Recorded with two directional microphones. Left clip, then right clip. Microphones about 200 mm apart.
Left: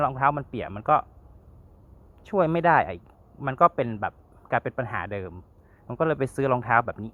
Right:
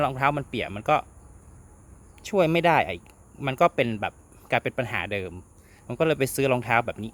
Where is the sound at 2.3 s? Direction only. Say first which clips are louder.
Even; 20° right (ahead or behind).